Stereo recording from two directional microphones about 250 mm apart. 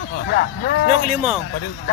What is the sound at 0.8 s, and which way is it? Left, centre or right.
Speech, right.